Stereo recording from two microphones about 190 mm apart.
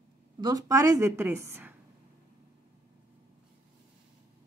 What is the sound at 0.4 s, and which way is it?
A woman's voice, 20° right (ahead or behind).